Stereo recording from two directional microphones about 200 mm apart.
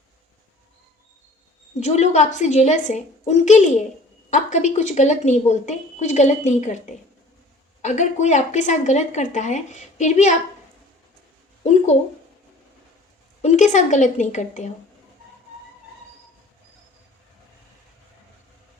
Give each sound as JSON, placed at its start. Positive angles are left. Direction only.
{"t": 1.8, "sound": "a woman's voice", "side_deg": 35}
{"t": 11.6, "sound": "a sound", "side_deg": 35}
{"t": 13.4, "sound": "a woman's voice", "side_deg": 35}